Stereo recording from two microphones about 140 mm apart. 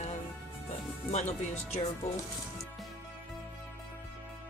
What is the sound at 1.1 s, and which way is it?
Speech, 50° left (ahead or behind).